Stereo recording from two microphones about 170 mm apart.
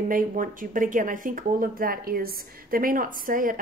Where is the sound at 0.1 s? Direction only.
50° right (ahead or behind).